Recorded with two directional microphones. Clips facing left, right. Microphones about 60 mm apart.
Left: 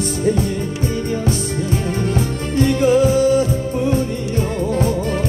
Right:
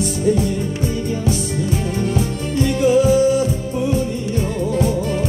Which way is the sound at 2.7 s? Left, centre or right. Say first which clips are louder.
Right 2 dB; left.